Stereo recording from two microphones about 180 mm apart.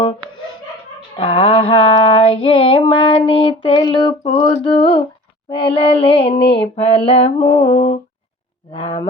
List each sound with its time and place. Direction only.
1.1 s female singing: 30° left (ahead or behind)